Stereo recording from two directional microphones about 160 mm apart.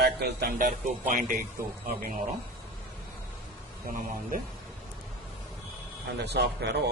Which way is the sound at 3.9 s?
55° right (ahead or behind).